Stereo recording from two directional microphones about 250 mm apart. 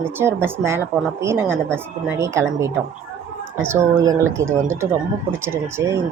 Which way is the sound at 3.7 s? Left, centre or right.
Centre.